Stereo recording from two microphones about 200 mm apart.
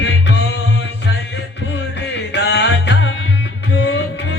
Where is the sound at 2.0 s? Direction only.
60° left (ahead or behind).